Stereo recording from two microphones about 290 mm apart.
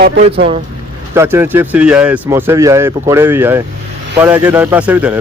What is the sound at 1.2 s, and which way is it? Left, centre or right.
A man's voice, centre.